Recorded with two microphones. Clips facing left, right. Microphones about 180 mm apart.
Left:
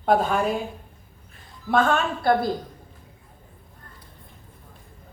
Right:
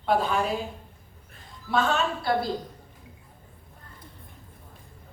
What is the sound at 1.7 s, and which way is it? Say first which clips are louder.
Speech: left 4 dB; 50° left (ahead or behind).